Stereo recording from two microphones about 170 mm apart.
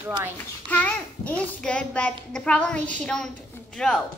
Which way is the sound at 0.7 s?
10° left (ahead or behind).